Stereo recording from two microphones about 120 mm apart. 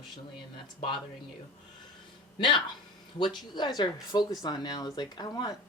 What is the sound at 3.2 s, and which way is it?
Speech, 40° left (ahead or behind).